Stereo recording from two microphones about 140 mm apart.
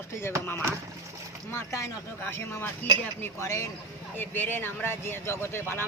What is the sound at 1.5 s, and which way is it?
Speech, 20° left (ahead or behind).